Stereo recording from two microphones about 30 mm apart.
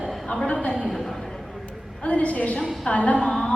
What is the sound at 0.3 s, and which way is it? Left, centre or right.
Speech, left.